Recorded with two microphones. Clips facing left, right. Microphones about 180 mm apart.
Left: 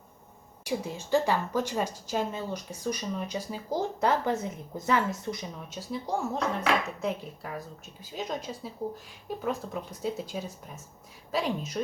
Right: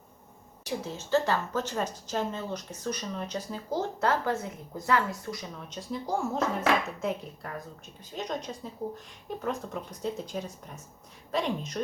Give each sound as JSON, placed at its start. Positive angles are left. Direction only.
{"t": 0.6, "sound": "a woman's voice", "side_deg": 10}
{"t": 5.6, "sound": "speech", "side_deg": 5}